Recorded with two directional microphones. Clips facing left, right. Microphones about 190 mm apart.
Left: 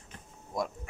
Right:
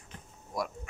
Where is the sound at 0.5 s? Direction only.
20° left (ahead or behind).